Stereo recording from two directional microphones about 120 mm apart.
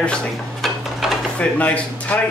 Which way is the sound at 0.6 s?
Centre (ahead or behind).